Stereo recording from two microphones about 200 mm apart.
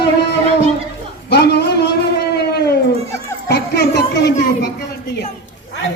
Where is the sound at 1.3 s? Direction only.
55° left (ahead or behind).